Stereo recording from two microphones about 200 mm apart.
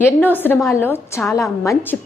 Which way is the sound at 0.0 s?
10° left (ahead or behind).